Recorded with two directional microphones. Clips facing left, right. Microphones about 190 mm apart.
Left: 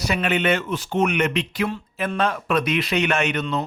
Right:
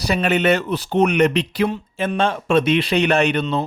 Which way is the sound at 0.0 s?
35° right (ahead or behind).